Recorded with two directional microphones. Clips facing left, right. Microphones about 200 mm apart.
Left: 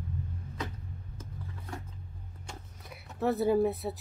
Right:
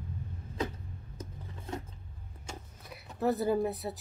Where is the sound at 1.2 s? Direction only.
20° right (ahead or behind).